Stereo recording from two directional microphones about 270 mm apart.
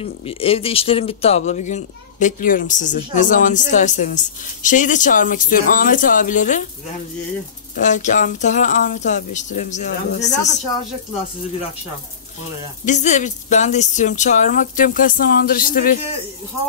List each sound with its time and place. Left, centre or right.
0.0 s speech: left
7.7 s speech: left
12.8 s speech: left